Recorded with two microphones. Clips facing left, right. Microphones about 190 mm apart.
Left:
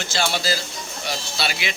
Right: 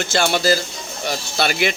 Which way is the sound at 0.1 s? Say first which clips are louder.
Right 6 dB; 55° right (ahead or behind).